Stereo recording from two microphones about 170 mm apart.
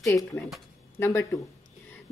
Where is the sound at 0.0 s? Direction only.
20° left (ahead or behind).